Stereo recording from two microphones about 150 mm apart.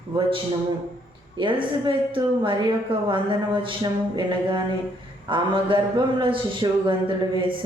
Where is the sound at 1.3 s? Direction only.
35° right (ahead or behind).